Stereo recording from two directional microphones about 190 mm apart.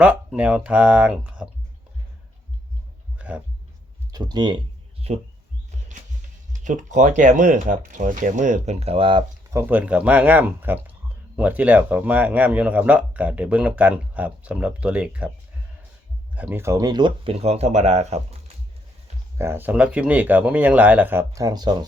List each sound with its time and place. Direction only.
0.0 s speech: 5° right (ahead or behind)
3.2 s a sound: 5° right (ahead or behind)
4.1 s speech: 20° right (ahead or behind)
6.5 s speech: 40° right (ahead or behind)
9.5 s speech: 10° right (ahead or behind)
16.3 s speech: 10° right (ahead or behind); by 18.5 s 35° right (ahead or behind)
19.4 s speech: 10° right (ahead or behind)